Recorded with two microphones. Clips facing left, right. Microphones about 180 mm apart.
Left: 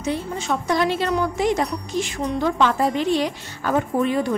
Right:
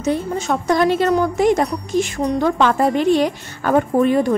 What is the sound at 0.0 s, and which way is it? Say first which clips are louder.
A woman's voice: right 5 dB; 45° right (ahead or behind).